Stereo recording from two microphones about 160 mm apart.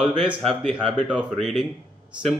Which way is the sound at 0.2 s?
5° right (ahead or behind).